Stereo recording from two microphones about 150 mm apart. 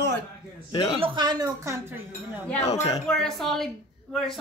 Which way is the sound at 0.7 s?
35° left (ahead or behind).